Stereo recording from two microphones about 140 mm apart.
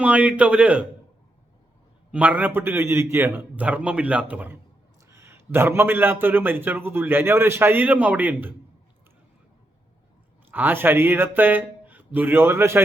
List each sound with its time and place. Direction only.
0.0 s a man's voice: 10° right (ahead or behind)
2.1 s a man's voice: 10° right (ahead or behind)
10.5 s a man's voice: 15° right (ahead or behind)